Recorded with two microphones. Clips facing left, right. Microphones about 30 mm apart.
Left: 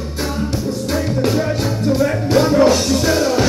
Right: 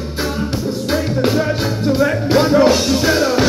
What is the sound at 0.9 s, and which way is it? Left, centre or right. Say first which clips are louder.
Music: right 1 dB; centre.